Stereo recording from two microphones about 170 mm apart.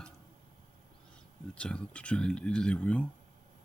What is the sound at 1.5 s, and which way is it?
Speech, 5° left (ahead or behind).